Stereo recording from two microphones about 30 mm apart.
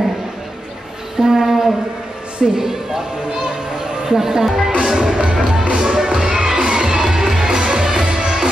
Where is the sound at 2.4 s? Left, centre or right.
Right.